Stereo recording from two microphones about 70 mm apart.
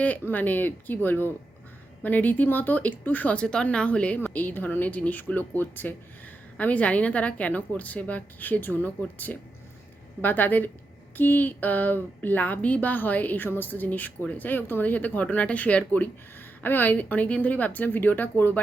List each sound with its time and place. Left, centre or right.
0.0 s speech: left